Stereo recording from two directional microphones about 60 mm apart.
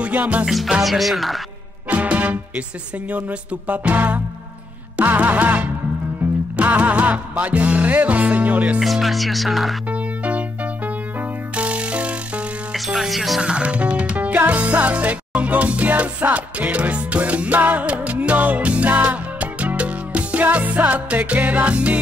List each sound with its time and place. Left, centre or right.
0.0 s music: right
0.5 s speech: centre
1.9 s music: right
8.8 s speech: centre
9.8 s music: right
12.7 s music: centre
13.4 s music: centre